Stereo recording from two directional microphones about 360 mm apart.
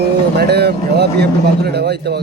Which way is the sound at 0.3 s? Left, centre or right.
Right.